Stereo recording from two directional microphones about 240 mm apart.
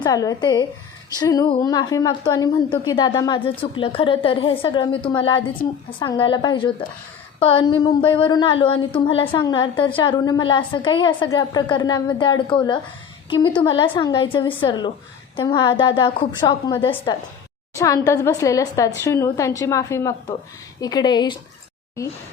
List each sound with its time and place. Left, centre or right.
0.0 s a woman's voice: centre